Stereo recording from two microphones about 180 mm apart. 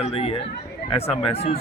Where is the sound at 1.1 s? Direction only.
35° left (ahead or behind).